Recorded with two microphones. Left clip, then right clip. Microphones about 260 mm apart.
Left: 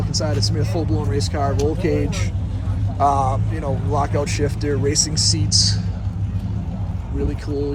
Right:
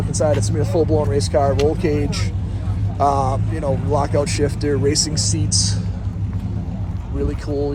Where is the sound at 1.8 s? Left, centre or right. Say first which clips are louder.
Right 1 dB; centre.